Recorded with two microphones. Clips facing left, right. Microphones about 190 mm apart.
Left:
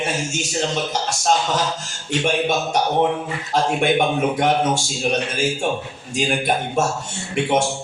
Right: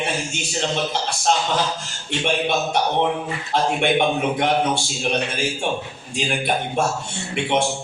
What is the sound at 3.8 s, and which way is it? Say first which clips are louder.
A man's voice: left 1 dB; 45° left (ahead or behind).